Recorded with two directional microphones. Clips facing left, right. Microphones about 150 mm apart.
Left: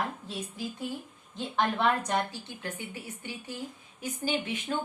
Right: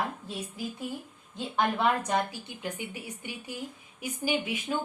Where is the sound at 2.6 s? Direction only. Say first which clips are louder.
Right 3 dB; 15° right (ahead or behind).